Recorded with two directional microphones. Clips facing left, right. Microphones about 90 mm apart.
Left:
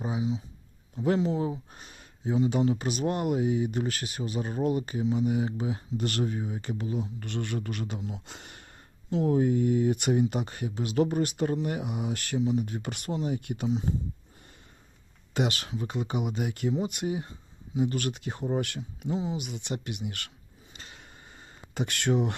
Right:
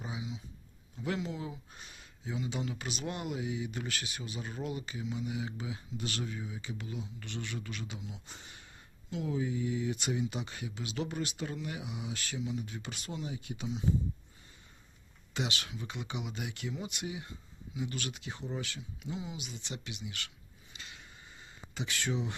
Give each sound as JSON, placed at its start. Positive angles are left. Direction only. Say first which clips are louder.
{"t": 0.0, "sound": "speech", "louder": "left 11 dB", "side_deg": 35}
{"t": 6.7, "sound": "speech", "louder": "left 9 dB", "side_deg": 40}
{"t": 8.3, "sound": "speech", "louder": "left 5 dB", "side_deg": 65}
{"t": 9.0, "sound": "speech", "louder": "left 10 dB", "side_deg": 45}
{"t": 13.1, "sound": "speech", "louder": "left 10 dB", "side_deg": 40}
{"t": 13.3, "sound": "speech", "louder": "left 9 dB", "side_deg": 55}
{"t": 15.3, "sound": "speech", "louder": "left 8 dB", "side_deg": 45}
{"t": 19.4, "sound": "speech", "louder": "left 9 dB", "side_deg": 60}
{"t": 20.7, "sound": "a sound", "louder": "left 2 dB", "side_deg": 45}